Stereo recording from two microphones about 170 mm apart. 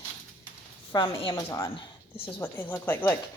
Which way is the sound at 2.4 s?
10° left (ahead or behind).